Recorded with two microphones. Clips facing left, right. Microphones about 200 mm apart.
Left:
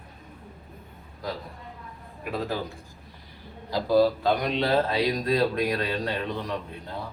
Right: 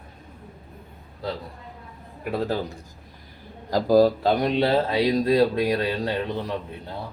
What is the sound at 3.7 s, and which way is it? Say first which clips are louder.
Speech: right 4 dB; 45° right (ahead or behind).